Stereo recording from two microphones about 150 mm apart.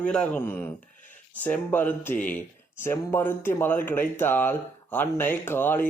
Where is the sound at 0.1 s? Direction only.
10° left (ahead or behind).